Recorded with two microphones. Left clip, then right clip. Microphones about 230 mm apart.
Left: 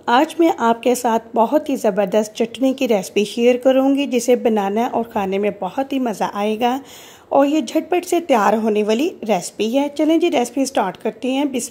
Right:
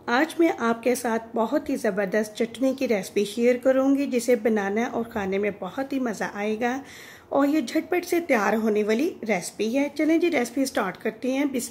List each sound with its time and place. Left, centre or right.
0.0 s a woman's voice: left